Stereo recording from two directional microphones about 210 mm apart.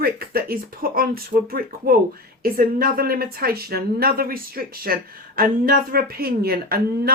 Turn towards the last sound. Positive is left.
turn(degrees=-45)  # may be behind; listen again after turning